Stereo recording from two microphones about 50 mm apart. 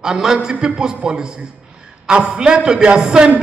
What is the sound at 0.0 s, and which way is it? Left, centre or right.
A man's voice, centre.